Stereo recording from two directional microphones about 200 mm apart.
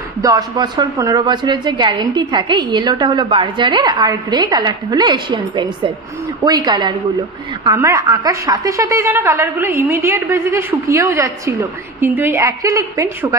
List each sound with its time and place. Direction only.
0.2 s a woman's voice: 20° right (ahead or behind)